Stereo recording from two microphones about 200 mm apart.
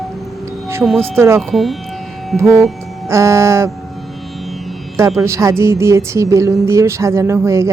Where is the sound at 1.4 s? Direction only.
Centre (ahead or behind).